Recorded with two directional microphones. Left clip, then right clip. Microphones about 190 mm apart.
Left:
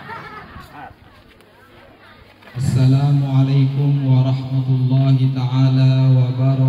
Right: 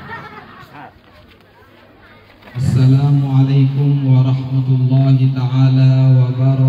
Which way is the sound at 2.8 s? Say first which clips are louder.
Right 2 dB; 25° left (ahead or behind).